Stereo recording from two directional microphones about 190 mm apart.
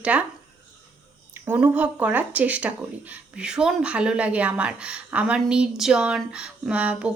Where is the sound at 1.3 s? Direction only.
10° right (ahead or behind).